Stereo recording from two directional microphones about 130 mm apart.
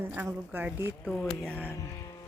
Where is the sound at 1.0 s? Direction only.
5° left (ahead or behind).